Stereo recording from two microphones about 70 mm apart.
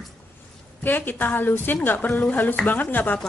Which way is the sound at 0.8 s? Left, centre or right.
Left.